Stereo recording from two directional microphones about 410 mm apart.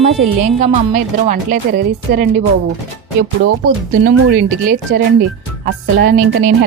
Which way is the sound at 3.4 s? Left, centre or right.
Right.